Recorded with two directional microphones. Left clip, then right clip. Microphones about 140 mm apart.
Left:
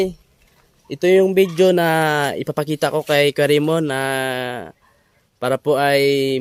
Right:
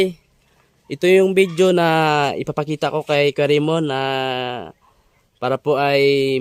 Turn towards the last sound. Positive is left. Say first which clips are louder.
# even
turn(degrees=-25)  # may be behind; listen again after turning